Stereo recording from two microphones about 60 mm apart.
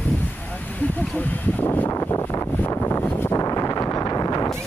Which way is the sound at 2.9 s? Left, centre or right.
Left.